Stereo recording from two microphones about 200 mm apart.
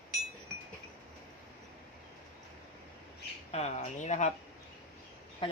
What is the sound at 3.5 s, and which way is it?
Speech, 30° left (ahead or behind).